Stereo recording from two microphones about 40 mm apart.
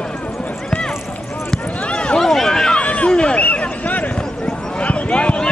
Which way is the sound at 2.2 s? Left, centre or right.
Centre.